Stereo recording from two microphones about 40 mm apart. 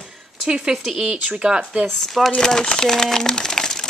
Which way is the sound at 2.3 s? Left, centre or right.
Centre.